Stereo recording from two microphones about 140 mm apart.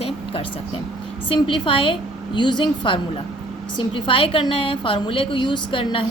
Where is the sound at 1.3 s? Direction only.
35° left (ahead or behind).